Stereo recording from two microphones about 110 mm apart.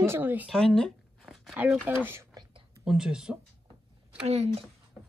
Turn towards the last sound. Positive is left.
turn(degrees=-70)  # may be behind; listen again after turning